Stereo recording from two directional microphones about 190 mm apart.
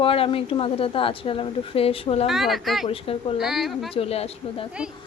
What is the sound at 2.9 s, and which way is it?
Speech, 30° left (ahead or behind).